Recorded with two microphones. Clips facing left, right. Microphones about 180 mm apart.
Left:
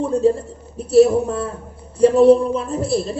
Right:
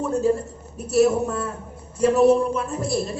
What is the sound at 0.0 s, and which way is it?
A man's voice, 30° left (ahead or behind).